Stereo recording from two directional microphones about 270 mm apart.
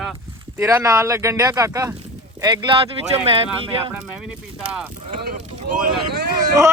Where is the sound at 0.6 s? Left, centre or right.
Centre.